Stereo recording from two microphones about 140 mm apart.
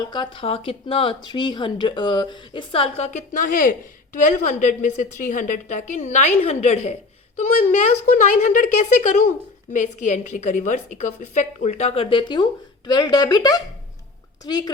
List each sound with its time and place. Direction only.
0.1 s speech: 35° left (ahead or behind)
3.1 s a woman's voice: 65° left (ahead or behind); by 14.7 s 30° left (ahead or behind)